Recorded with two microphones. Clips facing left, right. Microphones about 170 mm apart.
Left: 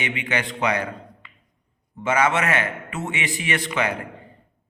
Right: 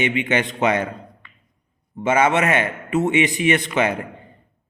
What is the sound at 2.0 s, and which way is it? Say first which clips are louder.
A man's voice: right 3 dB; 20° right (ahead or behind).